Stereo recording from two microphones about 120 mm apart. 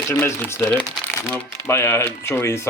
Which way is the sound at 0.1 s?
20° left (ahead or behind).